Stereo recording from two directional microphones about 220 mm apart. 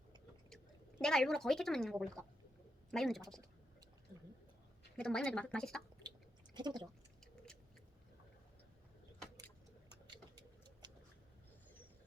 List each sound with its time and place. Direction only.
0.5 s speech: 5° left (ahead or behind)
4.9 s speech: 5° left (ahead or behind)
6.5 s speech: 20° right (ahead or behind)